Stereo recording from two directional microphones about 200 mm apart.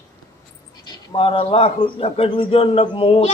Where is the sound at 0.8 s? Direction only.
25° left (ahead or behind).